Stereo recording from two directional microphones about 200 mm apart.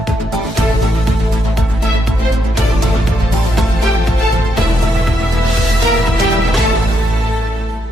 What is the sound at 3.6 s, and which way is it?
Music, centre (ahead or behind).